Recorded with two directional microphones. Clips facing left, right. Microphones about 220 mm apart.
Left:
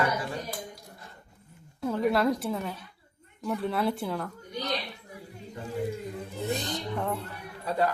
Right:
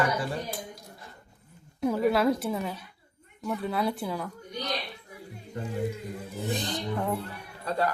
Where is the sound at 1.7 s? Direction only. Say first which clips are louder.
Right 3 dB; 15° right (ahead or behind).